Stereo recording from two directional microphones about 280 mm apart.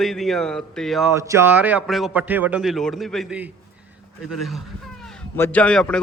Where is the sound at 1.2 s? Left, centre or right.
Centre.